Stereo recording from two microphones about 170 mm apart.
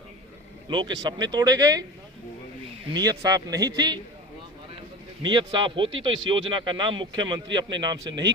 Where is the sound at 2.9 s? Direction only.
20° right (ahead or behind).